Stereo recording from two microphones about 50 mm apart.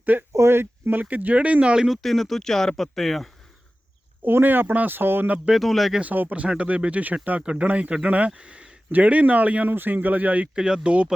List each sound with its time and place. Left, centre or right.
0.0 s speech: right
0.3 s speech: right
1.0 s speech: right
2.0 s speech: centre
4.2 s speech: right
5.5 s speech: centre
6.0 s speech: right
9.7 s speech: right
10.5 s speech: centre